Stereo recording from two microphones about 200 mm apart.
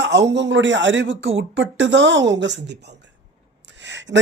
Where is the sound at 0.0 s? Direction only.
60° right (ahead or behind).